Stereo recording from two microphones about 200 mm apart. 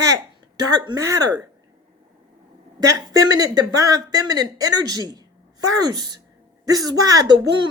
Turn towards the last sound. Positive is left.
turn(degrees=-20)  # may be behind; listen again after turning